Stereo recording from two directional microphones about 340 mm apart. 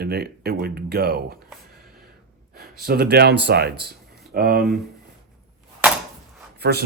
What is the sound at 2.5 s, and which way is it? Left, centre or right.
Speech, right.